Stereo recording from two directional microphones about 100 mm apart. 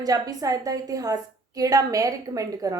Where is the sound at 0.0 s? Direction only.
40° right (ahead or behind).